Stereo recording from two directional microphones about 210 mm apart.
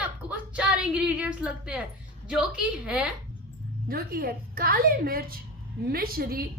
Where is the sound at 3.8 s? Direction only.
45° right (ahead or behind).